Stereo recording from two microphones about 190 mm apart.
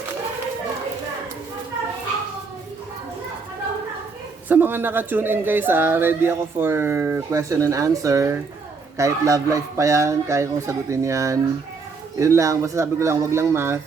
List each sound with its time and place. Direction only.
4.4 s speech: 10° right (ahead or behind)